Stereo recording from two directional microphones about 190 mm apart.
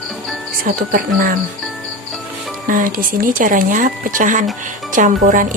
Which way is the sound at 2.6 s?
45° right (ahead or behind).